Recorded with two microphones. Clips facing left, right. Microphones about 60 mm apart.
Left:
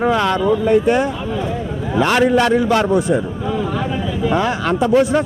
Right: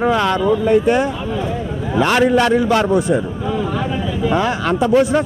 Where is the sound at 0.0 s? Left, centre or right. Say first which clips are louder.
Even; right.